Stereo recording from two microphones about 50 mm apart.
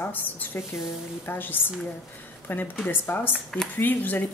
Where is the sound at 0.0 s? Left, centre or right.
Left.